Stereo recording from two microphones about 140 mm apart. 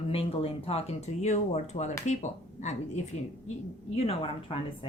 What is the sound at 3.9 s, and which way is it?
Speech, 45° left (ahead or behind).